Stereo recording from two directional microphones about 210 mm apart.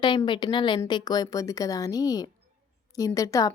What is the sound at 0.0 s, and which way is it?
A woman's voice, 20° left (ahead or behind).